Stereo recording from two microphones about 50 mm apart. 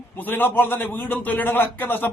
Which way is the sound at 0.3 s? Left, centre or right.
Left.